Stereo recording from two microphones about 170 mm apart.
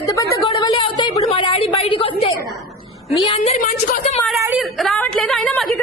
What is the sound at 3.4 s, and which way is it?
Speech, 50° left (ahead or behind).